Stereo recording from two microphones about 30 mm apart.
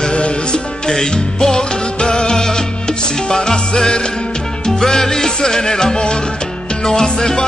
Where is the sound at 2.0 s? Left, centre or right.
Left.